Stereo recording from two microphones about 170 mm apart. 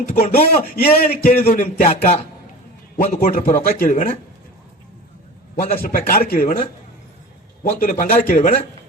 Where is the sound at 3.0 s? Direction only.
50° left (ahead or behind).